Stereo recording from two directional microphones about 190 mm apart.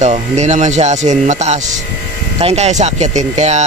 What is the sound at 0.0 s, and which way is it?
A man's voice, 35° right (ahead or behind).